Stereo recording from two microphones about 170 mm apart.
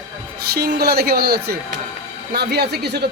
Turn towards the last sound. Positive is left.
turn(degrees=-75)  # may be behind; listen again after turning